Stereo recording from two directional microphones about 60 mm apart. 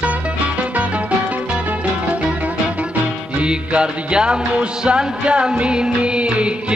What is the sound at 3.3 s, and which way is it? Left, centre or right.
Music, centre.